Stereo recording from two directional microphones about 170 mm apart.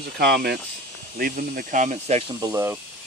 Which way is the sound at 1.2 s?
55° right (ahead or behind).